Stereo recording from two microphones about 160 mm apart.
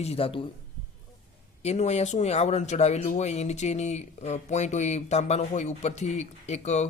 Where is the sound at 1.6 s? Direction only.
45° left (ahead or behind).